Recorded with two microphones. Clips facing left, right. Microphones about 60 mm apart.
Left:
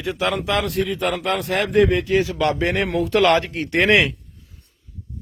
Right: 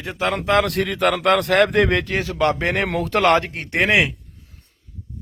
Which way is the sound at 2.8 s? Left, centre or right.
Right.